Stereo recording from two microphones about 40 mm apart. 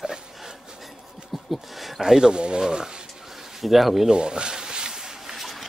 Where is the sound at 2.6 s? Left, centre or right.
Centre.